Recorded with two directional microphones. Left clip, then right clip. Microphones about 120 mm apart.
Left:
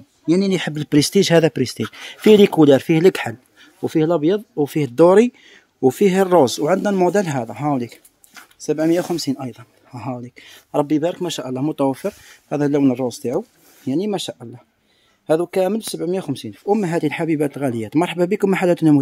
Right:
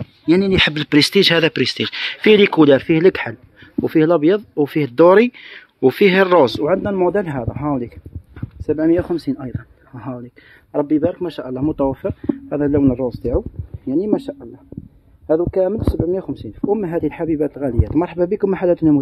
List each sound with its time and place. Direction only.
0.3 s speech: 20° left (ahead or behind)
0.9 s speech: 40° left (ahead or behind)
3.8 s speech: 5° left (ahead or behind)
4.7 s speech: 25° left (ahead or behind)
10.7 s speech: 40° left (ahead or behind)
11.3 s speech: 25° left (ahead or behind)
13.8 s speech: 15° left (ahead or behind)
16.3 s speech: 35° left (ahead or behind)